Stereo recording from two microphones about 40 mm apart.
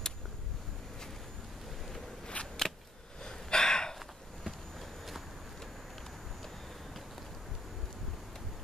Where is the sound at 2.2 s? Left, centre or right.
Centre.